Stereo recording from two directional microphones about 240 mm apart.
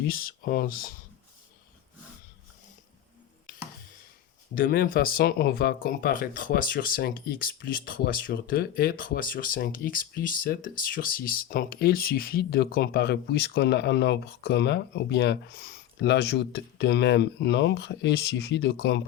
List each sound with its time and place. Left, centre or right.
0.1 s speech: left
4.5 s speech: left